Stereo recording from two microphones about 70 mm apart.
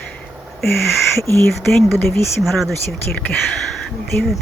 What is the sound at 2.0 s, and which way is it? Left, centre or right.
Speech, left.